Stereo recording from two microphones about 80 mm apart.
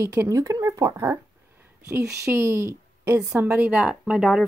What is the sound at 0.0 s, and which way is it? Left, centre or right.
A woman's voice, right.